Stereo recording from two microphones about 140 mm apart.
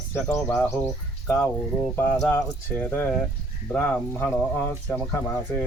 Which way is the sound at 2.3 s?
15° left (ahead or behind).